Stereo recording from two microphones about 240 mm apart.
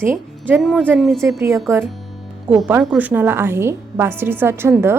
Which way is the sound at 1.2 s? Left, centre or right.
Centre.